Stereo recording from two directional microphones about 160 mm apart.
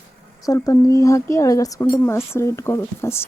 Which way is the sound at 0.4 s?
20° left (ahead or behind).